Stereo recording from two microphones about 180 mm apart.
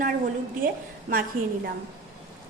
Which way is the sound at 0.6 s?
50° right (ahead or behind).